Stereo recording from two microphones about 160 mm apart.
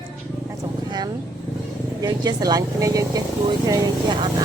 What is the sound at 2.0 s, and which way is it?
Speech, 25° right (ahead or behind).